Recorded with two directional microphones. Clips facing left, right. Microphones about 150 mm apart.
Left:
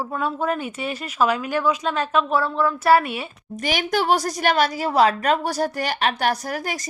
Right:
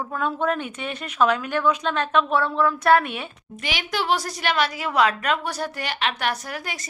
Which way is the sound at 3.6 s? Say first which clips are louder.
Left 4 dB; 45° left (ahead or behind).